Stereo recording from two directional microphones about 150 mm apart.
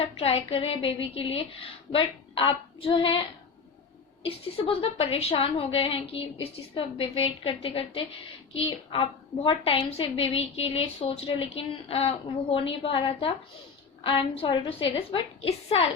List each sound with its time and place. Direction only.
0.0 s a woman's voice: 40° left (ahead or behind)